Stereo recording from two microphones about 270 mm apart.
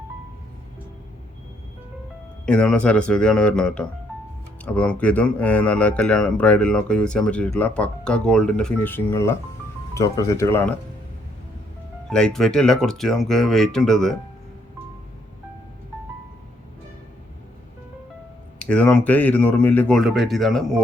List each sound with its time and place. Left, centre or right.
2.5 s speech: centre
12.0 s speech: centre
18.6 s speech: centre